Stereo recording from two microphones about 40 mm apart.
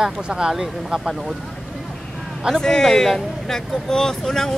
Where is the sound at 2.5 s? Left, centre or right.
Centre.